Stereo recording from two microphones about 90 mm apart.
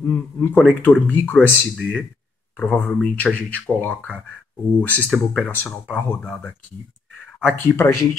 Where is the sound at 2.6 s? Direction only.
25° left (ahead or behind).